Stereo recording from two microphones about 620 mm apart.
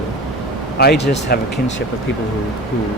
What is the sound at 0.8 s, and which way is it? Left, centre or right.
Speech, centre.